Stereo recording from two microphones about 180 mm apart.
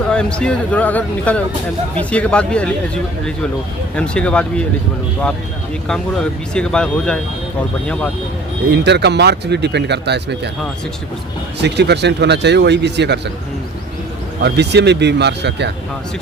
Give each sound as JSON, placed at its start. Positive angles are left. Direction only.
{"t": 0.1, "sound": "speech", "side_deg": 5}
{"t": 6.5, "sound": "speech", "side_deg": 5}
{"t": 8.7, "sound": "speech", "side_deg": -70}
{"t": 11.6, "sound": "speech", "side_deg": -70}
{"t": 14.4, "sound": "speech", "side_deg": -70}